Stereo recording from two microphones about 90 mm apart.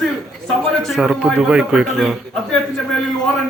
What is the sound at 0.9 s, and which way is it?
A man's voice, 10° right (ahead or behind).